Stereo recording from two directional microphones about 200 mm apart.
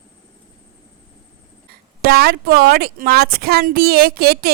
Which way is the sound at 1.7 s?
50° right (ahead or behind).